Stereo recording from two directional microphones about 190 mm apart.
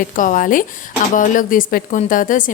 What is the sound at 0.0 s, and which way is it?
A woman's voice, 45° left (ahead or behind).